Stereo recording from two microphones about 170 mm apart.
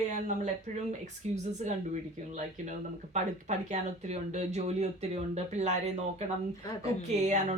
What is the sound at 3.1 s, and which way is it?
Speech, 45° right (ahead or behind).